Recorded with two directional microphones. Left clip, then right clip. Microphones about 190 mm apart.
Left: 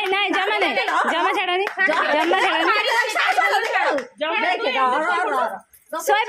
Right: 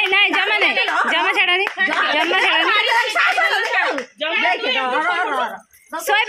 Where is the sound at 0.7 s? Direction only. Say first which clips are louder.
Right 2 dB; 35° right (ahead or behind).